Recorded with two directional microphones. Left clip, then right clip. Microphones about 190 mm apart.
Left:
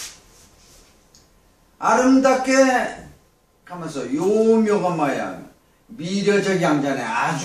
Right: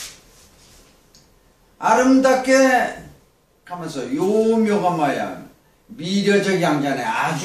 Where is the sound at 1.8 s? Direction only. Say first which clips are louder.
Right 1 dB; 15° right (ahead or behind).